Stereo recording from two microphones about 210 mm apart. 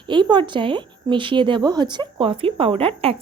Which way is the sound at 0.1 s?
20° right (ahead or behind).